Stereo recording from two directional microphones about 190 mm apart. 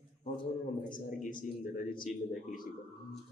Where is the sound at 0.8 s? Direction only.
45° left (ahead or behind).